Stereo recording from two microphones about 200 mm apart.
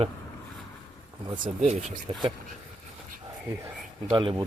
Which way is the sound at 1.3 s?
40° right (ahead or behind).